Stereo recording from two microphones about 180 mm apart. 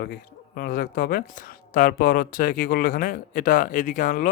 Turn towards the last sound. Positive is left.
turn(degrees=45)  # may be behind; listen again after turning